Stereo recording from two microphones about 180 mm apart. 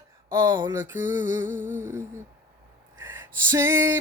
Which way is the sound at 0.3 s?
25° right (ahead or behind).